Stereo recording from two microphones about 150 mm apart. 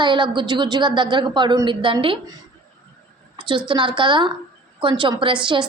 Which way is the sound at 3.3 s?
30° right (ahead or behind).